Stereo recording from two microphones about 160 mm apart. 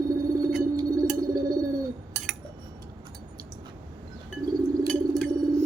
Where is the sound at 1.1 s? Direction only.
25° right (ahead or behind).